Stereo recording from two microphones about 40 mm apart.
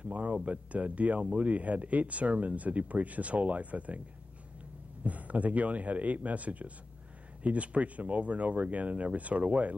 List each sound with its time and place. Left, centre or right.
0.1 s speech: right
5.0 s speech: right